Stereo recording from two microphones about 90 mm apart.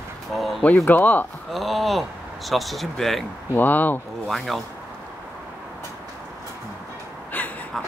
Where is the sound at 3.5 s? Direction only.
20° left (ahead or behind).